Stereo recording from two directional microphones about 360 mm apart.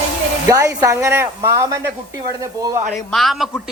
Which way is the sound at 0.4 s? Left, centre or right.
Centre.